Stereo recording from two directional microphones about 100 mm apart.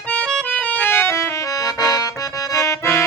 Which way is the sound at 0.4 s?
15° left (ahead or behind).